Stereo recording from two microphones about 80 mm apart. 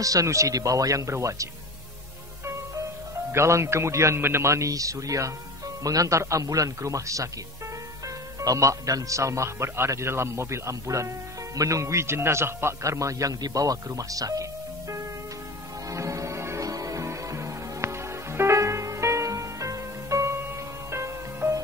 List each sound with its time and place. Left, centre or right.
0.0 s speech: right
3.3 s speech: right
8.4 s speech: right
15.9 s music: right
20.4 s music: right